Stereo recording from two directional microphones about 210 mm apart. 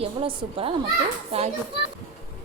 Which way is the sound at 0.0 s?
25° right (ahead or behind).